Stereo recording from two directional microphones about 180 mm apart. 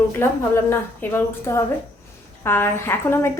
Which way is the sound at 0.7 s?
15° left (ahead or behind).